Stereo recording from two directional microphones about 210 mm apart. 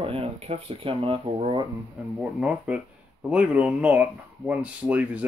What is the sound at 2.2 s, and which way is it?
Speech, centre (ahead or behind).